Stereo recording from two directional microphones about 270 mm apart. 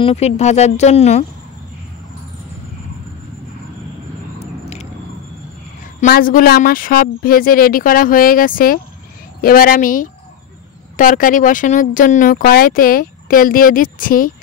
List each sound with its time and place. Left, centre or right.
0.0 s speech: left
4.4 s a sound: left
5.9 s speech: left